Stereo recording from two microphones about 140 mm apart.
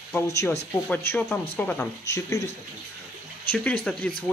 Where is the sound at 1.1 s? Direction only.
10° left (ahead or behind).